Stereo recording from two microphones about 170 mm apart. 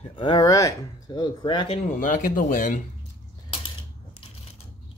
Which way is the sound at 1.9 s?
55° left (ahead or behind).